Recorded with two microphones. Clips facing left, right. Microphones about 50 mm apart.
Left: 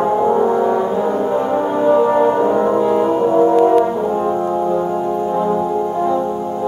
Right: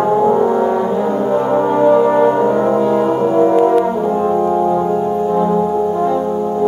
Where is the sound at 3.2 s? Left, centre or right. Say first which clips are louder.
Even; right.